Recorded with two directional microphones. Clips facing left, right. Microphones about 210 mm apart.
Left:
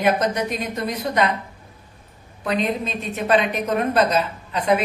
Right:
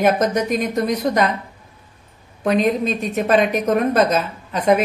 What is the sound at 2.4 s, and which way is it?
Speech, 45° right (ahead or behind).